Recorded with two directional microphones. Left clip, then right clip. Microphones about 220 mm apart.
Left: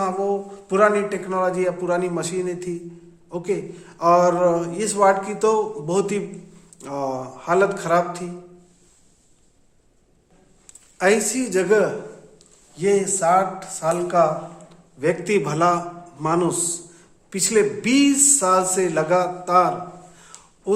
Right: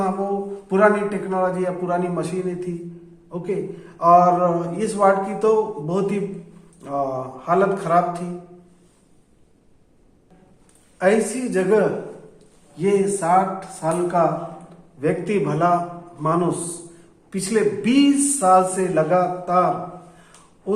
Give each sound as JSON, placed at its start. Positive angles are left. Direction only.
{"t": 0.7, "sound": "a man's voice", "side_deg": 50}
{"t": 10.9, "sound": "a man's voice", "side_deg": 55}